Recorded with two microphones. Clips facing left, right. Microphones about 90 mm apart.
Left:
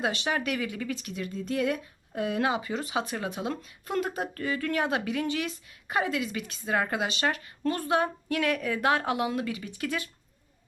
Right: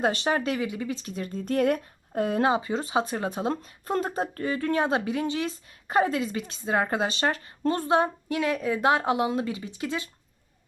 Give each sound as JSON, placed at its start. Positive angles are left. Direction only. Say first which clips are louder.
{"t": 0.0, "sound": "speech", "louder": "right 4 dB", "side_deg": -40}